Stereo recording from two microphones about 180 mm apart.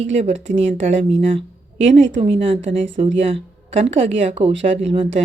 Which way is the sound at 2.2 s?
30° right (ahead or behind).